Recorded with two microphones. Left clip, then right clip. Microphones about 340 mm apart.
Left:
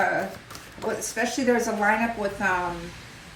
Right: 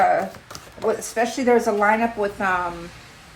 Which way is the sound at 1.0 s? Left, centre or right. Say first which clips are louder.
Right 4 dB; right.